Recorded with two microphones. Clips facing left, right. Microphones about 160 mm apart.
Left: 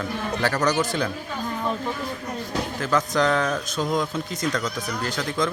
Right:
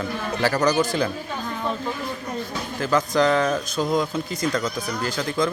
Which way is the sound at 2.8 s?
Centre (ahead or behind).